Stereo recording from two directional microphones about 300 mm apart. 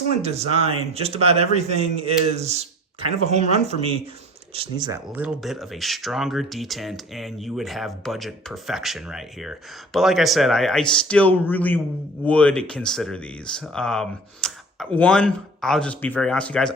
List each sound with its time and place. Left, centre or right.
0.2 s a man's voice: right
5.0 s speech: centre